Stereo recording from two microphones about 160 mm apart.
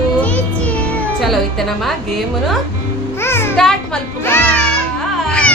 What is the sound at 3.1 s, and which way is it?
Music, 15° left (ahead or behind).